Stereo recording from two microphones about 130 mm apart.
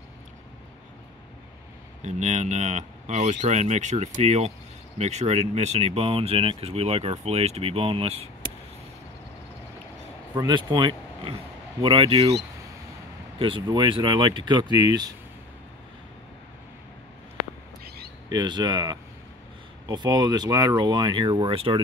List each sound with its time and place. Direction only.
2.0 s speech: 65° right (ahead or behind); by 8.3 s 50° right (ahead or behind)
10.3 s speech: 35° right (ahead or behind); by 12.4 s 50° right (ahead or behind)
13.7 s speech: 35° right (ahead or behind)
18.3 s speech: 35° right (ahead or behind)